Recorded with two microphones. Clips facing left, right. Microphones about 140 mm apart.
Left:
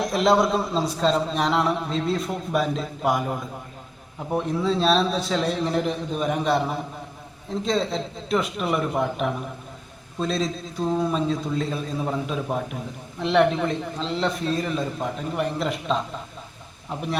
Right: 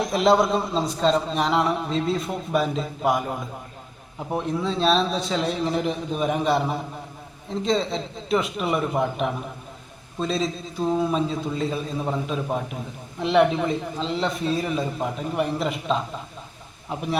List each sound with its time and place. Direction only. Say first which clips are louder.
0.0 s a man's voice: right 1 dB; centre (ahead or behind)